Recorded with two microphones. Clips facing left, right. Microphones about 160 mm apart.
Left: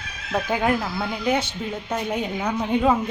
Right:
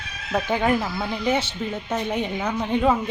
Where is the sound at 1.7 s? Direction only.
Centre (ahead or behind).